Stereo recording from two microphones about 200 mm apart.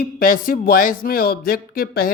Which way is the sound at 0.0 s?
45° left (ahead or behind).